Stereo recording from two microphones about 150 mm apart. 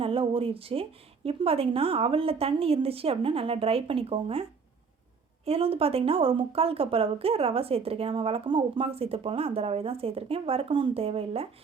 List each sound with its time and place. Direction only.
0.0 s speech: 40° right (ahead or behind)
5.5 s speech: 40° right (ahead or behind)